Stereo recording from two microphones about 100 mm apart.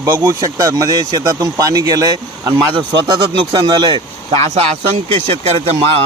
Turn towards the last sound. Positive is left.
turn(degrees=-90)